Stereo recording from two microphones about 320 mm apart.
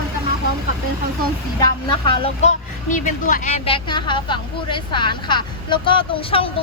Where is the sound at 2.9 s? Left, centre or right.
Left.